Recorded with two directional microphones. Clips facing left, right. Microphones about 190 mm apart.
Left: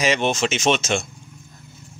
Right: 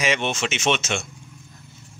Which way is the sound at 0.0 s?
35° left (ahead or behind).